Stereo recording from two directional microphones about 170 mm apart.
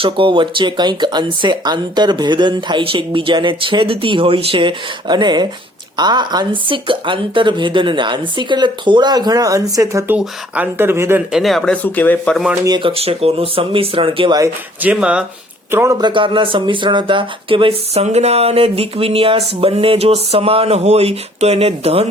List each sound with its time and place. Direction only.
0.0 s speech: 30° right (ahead or behind)
10.2 s speech: 10° right (ahead or behind)
11.3 s speech: centre (ahead or behind)
12.6 s speech: 30° right (ahead or behind)
14.8 s speech: 10° right (ahead or behind); by 22.0 s 35° right (ahead or behind)